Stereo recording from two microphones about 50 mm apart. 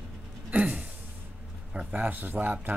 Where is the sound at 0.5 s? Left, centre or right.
Right.